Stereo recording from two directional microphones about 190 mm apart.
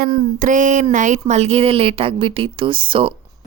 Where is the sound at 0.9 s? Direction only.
40° right (ahead or behind).